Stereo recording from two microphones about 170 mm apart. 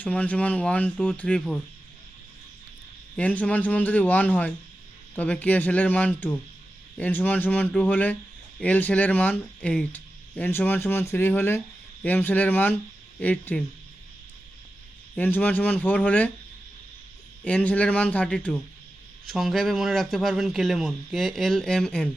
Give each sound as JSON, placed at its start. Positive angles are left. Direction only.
{"t": 0.0, "sound": "speech", "side_deg": 10}
{"t": 3.2, "sound": "speech", "side_deg": 10}
{"t": 15.1, "sound": "speech", "side_deg": 10}
{"t": 17.4, "sound": "speech", "side_deg": 10}